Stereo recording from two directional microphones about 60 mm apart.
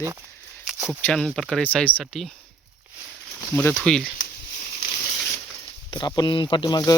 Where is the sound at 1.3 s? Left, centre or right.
Centre.